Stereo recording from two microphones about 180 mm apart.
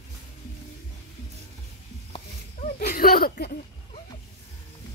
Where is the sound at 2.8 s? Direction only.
55° left (ahead or behind).